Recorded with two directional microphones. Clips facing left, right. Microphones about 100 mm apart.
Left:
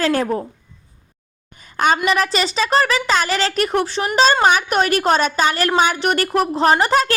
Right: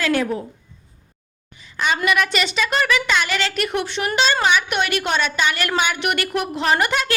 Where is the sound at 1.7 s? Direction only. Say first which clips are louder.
Left 5 dB; 45° left (ahead or behind).